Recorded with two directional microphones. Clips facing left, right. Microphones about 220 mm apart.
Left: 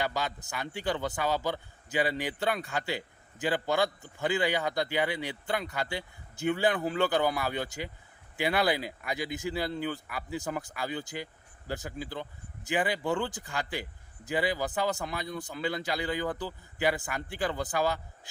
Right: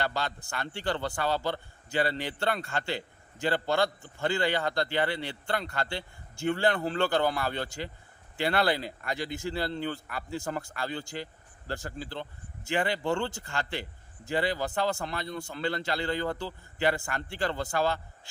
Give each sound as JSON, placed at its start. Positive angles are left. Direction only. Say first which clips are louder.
{"t": 0.0, "sound": "speech", "louder": "even", "side_deg": 15}
{"t": 2.9, "sound": "a man's voice", "louder": "right 1 dB", "side_deg": 15}